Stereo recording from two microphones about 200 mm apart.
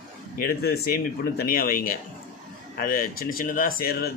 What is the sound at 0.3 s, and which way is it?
Speech, 50° left (ahead or behind).